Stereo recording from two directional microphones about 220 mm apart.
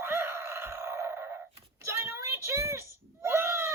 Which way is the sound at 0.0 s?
10° right (ahead or behind).